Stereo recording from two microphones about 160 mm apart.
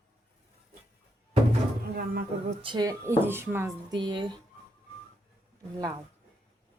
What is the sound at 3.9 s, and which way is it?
Speech, 30° right (ahead or behind).